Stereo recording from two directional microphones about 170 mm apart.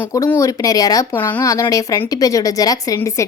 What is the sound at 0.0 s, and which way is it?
Speech, 20° left (ahead or behind).